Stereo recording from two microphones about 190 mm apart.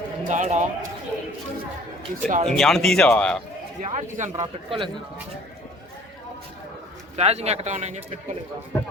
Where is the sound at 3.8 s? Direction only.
40° right (ahead or behind).